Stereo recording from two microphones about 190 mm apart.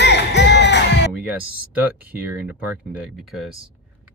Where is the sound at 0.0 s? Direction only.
65° left (ahead or behind).